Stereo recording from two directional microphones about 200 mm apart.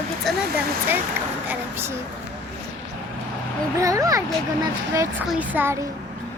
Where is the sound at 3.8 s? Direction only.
15° right (ahead or behind).